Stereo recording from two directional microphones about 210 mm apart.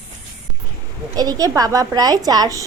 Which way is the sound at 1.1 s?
20° right (ahead or behind).